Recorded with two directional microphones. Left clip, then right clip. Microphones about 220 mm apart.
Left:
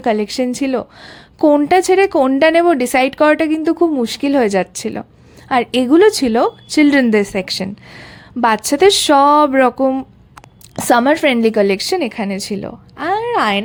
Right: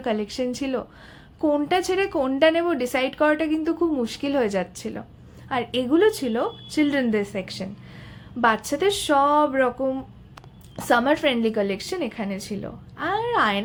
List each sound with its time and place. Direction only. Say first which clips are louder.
0.0 s a woman's voice: left 9 dB; 40° left (ahead or behind)